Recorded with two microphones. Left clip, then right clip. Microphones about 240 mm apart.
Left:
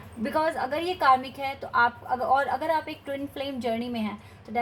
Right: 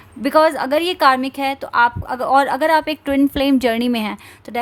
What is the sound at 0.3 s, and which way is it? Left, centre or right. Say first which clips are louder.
A woman's voice: right 12 dB; right.